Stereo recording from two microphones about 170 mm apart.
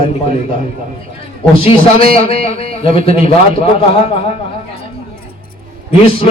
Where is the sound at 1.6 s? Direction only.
35° left (ahead or behind).